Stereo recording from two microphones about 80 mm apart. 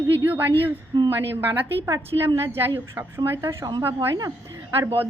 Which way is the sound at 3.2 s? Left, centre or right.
Right.